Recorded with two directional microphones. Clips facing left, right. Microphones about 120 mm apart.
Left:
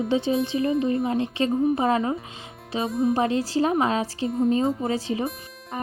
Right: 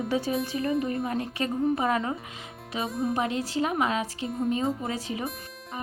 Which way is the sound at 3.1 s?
30° left (ahead or behind).